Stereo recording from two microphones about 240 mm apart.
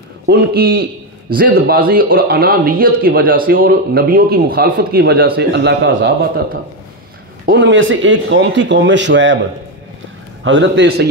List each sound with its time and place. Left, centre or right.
0.3 s a man's voice: right
10.4 s speech: right